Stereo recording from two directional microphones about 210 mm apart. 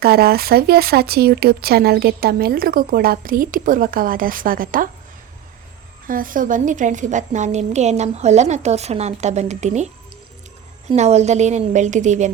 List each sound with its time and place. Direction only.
0.0 s speech: 45° right (ahead or behind)
6.1 s a woman's voice: 40° right (ahead or behind)